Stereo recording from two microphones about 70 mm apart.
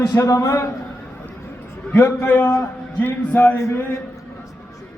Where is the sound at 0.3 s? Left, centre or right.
Left.